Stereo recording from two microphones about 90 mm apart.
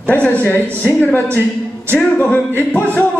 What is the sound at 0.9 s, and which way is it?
Speech, 20° left (ahead or behind).